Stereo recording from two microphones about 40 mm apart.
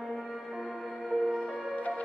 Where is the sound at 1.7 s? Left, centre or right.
Left.